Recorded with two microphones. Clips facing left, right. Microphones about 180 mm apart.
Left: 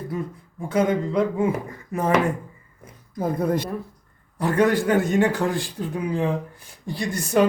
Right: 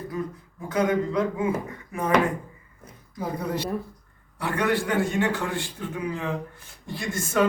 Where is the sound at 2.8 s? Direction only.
50° left (ahead or behind).